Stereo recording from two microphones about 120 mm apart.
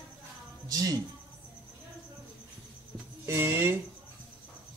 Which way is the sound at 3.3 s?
20° right (ahead or behind).